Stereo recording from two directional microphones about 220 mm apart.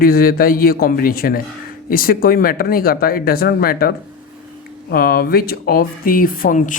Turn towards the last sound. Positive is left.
turn(degrees=40)  # may be behind; listen again after turning